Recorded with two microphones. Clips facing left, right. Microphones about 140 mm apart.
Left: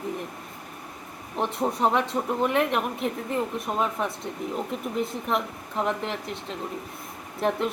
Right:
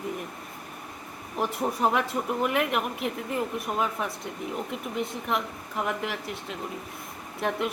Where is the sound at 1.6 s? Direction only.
25° left (ahead or behind).